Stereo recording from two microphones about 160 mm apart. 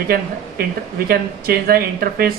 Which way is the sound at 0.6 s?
75° right (ahead or behind).